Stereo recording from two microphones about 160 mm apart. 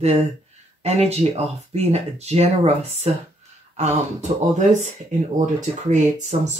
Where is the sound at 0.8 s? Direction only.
40° right (ahead or behind).